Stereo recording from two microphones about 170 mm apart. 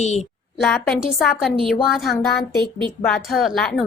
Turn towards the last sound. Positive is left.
turn(degrees=0)  # may be behind; listen again after turning